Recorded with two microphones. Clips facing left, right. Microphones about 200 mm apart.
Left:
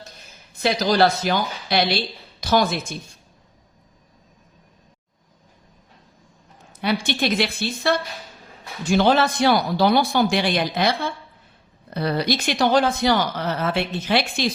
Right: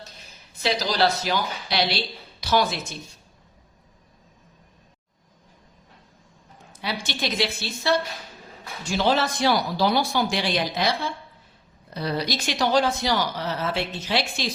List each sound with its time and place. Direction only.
0.6 s a woman's voice: 55° left (ahead or behind)
2.4 s a sound: 45° left (ahead or behind)
6.8 s speech: 55° left (ahead or behind)